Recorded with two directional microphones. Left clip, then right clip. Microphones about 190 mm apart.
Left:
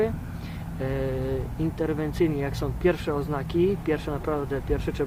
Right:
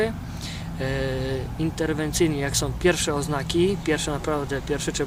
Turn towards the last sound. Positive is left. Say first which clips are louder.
# right 2 dB
turn(degrees=-5)  # may be behind; listen again after turning